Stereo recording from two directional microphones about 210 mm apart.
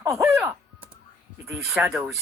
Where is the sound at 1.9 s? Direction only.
5° right (ahead or behind).